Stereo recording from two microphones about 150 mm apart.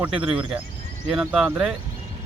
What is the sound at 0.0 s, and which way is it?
Speech, 5° right (ahead or behind).